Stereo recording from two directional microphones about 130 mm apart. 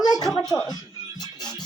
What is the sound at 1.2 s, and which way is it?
Music, 35° left (ahead or behind).